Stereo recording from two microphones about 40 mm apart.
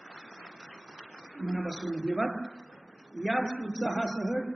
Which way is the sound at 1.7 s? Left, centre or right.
Centre.